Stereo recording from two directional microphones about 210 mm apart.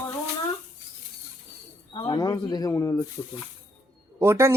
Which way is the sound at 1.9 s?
20° left (ahead or behind).